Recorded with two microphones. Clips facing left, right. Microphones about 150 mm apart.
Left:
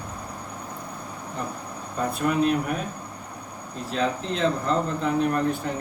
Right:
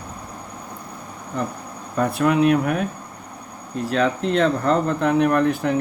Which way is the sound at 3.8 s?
85° right.